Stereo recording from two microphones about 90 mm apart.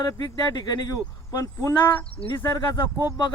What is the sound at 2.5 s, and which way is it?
Speech, 50° left (ahead or behind).